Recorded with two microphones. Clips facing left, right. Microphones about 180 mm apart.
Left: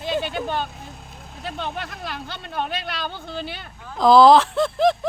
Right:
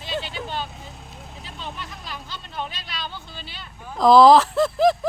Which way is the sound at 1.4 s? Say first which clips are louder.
Left 7 dB; 65° left (ahead or behind).